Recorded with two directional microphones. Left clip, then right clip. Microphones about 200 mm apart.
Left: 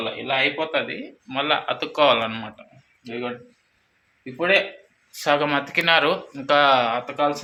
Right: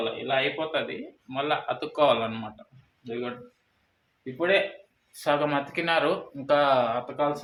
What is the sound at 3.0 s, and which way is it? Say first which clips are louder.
Speech: left 3 dB; 30° left (ahead or behind).